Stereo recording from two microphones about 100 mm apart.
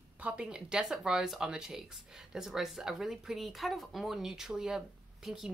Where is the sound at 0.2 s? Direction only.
10° right (ahead or behind).